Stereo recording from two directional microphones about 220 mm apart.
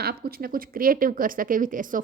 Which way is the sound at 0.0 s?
45° right (ahead or behind).